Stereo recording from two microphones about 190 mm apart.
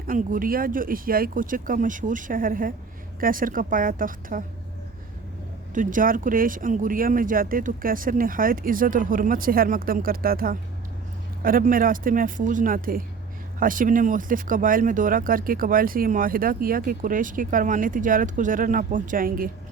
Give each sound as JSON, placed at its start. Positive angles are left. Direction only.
{"t": 0.1, "sound": "speech", "side_deg": -45}
{"t": 5.7, "sound": "speech", "side_deg": -45}